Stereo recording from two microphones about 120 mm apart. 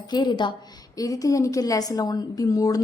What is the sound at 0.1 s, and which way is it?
A woman's voice, 35° left (ahead or behind).